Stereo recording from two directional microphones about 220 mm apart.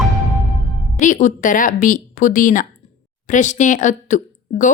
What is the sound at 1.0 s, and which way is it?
A woman's voice, 35° left (ahead or behind).